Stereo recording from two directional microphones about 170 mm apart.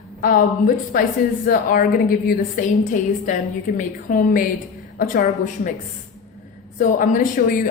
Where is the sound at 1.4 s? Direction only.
55° left (ahead or behind).